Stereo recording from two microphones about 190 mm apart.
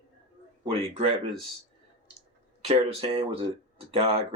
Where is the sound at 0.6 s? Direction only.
30° right (ahead or behind).